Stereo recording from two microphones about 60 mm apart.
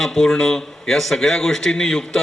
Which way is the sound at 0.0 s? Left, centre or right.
Centre.